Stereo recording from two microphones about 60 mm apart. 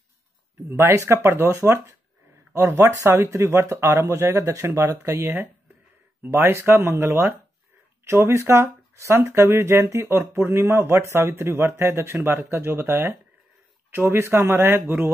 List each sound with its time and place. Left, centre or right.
0.7 s speech: right
6.2 s speech: right